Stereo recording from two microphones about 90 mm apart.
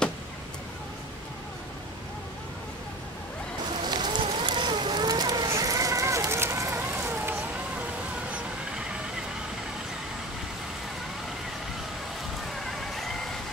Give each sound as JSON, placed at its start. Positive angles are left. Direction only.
{"t": 3.8, "sound": "boat", "side_deg": -55}
{"t": 12.5, "sound": "vehicle", "side_deg": 5}